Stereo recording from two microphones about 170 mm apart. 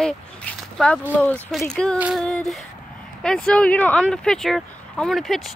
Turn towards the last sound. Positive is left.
turn(degrees=0)  # may be behind; listen again after turning